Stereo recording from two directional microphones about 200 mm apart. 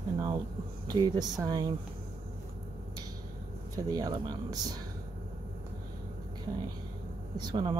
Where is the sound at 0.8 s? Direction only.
20° right (ahead or behind).